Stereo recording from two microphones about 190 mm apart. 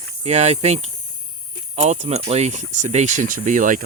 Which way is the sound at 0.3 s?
35° right (ahead or behind).